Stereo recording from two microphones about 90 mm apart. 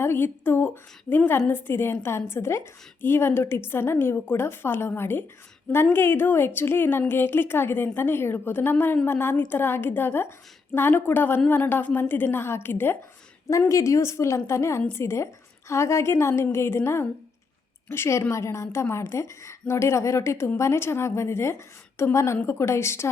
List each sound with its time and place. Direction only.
0.0 s a woman's voice: 25° left (ahead or behind)
13.7 s a woman's voice: 35° left (ahead or behind)